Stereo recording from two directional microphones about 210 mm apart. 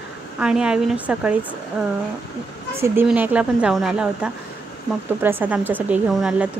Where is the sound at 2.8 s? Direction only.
10° right (ahead or behind).